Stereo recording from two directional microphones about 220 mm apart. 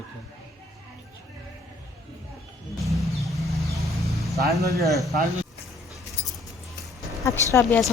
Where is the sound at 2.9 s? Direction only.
Centre (ahead or behind).